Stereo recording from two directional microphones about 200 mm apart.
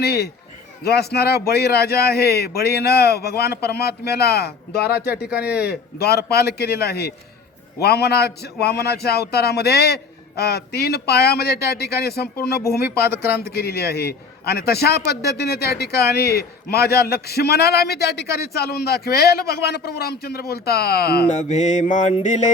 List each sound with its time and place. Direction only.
0.0 s a man's voice: 55° left (ahead or behind)
21.4 s mantra: 35° left (ahead or behind)